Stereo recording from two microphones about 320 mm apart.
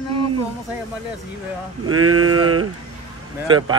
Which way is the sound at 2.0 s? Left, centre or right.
Right.